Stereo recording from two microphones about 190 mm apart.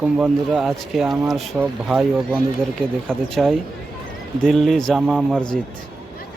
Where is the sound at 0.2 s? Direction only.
Centre (ahead or behind).